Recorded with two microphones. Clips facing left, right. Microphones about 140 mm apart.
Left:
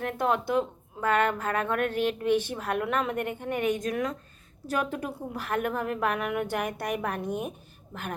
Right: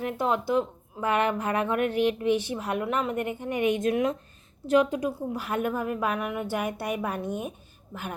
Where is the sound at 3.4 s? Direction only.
50° left (ahead or behind).